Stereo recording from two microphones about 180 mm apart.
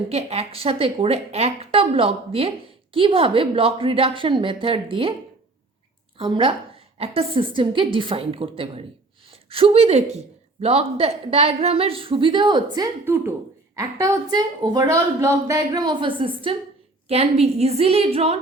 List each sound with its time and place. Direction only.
0.1 s a woman's voice: 35° right (ahead or behind)
6.1 s a woman's voice: 30° right (ahead or behind)